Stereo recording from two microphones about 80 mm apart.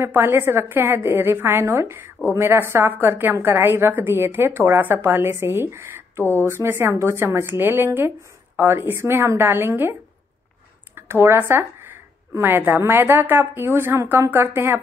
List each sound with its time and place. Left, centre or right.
0.0 s a woman's voice: right
11.0 s a woman's voice: right